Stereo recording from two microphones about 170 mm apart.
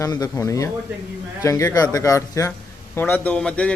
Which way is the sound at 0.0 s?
20° left (ahead or behind).